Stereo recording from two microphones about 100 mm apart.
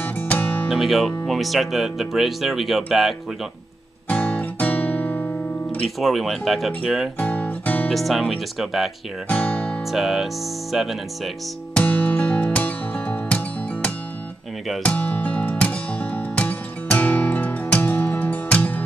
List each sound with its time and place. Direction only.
0.0 s music: 15° left (ahead or behind)
0.7 s speech: centre (ahead or behind)
4.1 s guitar: 15° left (ahead or behind)
5.9 s speech: centre (ahead or behind)
7.2 s guitar: 20° left (ahead or behind)
7.9 s speech: centre (ahead or behind)
9.3 s music: 15° left (ahead or behind)
9.8 s speech: centre (ahead or behind)
11.7 s music: 15° left (ahead or behind)